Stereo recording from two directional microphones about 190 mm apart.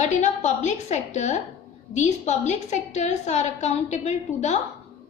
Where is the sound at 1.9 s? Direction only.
35° left (ahead or behind).